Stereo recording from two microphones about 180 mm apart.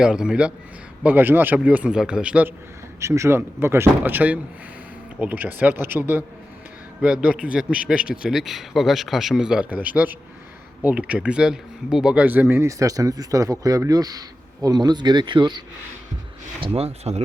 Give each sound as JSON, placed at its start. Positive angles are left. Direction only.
{"t": 0.0, "sound": "a man's voice", "side_deg": -5}